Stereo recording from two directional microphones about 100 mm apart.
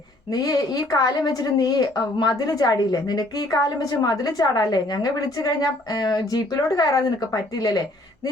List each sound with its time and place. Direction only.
0.3 s a woman's voice: 40° left (ahead or behind)